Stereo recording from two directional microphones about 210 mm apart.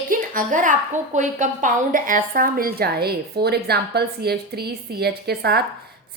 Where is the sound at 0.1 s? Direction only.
40° right (ahead or behind).